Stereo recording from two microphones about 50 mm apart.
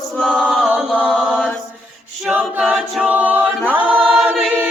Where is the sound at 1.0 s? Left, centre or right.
Centre.